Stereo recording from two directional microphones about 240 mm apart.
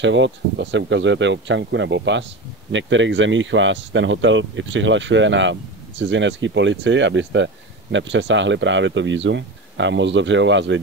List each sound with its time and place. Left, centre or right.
0.0 s speech: right